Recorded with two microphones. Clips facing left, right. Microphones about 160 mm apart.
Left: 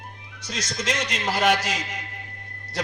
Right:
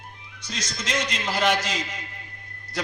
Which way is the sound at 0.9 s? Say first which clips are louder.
Even; 40° left (ahead or behind).